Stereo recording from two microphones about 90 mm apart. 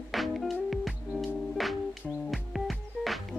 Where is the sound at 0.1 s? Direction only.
Centre (ahead or behind).